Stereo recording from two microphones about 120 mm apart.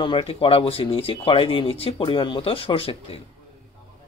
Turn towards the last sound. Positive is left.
turn(degrees=50)  # may be behind; listen again after turning